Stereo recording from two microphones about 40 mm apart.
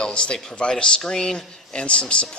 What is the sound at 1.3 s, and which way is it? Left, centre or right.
Speech, left.